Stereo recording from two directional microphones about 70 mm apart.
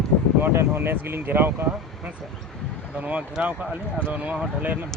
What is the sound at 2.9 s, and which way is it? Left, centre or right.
Speech, centre.